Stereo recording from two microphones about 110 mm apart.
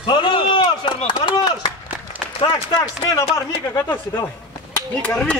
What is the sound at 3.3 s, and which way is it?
Speech, 25° left (ahead or behind).